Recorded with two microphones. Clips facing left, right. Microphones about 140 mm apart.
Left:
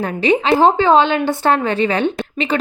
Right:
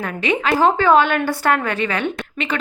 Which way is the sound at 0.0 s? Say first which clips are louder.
Left 5 dB; 30° left (ahead or behind).